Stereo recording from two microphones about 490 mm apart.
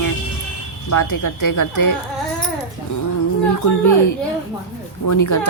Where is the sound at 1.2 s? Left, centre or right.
Left.